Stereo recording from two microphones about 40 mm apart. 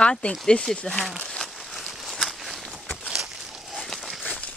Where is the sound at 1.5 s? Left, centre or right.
Centre.